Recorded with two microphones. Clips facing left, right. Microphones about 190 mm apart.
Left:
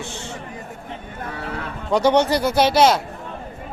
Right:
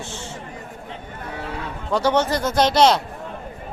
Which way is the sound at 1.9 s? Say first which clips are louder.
Left 3 dB; 15° left (ahead or behind).